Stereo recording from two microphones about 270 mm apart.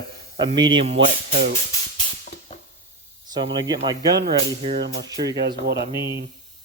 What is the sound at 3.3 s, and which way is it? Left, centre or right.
Speech, centre.